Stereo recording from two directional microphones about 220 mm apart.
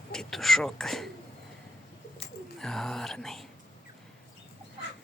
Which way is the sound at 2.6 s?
Centre (ahead or behind).